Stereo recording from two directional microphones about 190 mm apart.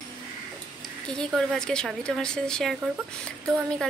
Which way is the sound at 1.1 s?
5° left (ahead or behind).